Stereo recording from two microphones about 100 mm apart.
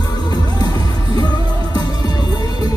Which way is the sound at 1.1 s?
45° left (ahead or behind).